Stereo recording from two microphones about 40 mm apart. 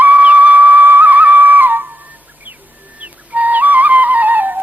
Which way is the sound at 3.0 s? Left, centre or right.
Right.